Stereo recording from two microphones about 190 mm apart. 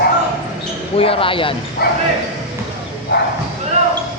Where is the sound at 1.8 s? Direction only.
55° left (ahead or behind).